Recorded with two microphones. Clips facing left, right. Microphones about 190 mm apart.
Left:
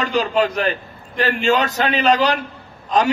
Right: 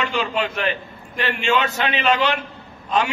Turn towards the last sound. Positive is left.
turn(degrees=40)  # may be behind; listen again after turning